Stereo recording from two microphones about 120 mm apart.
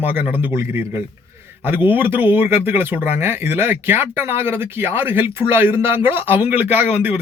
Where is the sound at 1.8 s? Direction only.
15° right (ahead or behind).